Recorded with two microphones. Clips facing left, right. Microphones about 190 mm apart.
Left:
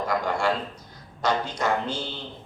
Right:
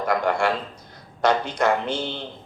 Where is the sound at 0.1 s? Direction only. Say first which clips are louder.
Right 4 dB; 60° right (ahead or behind).